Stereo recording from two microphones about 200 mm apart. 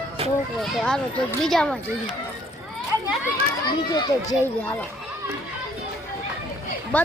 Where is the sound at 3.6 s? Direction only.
20° left (ahead or behind).